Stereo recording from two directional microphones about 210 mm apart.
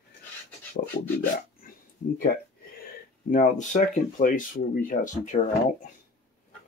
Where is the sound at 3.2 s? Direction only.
35° left (ahead or behind).